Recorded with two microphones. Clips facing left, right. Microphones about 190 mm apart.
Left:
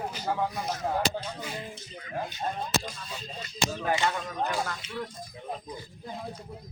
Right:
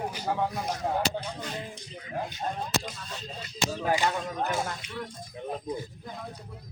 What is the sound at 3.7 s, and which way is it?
Speech, 10° right (ahead or behind).